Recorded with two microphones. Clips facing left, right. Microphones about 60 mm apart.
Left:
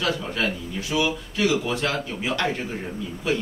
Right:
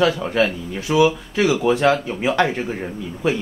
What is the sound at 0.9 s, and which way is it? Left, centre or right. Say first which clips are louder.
Speech: right 9 dB; right.